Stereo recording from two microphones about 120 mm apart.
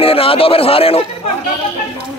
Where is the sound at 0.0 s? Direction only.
50° left (ahead or behind).